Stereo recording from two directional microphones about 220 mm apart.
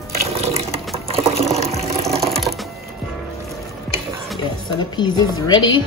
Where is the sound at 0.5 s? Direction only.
25° right (ahead or behind).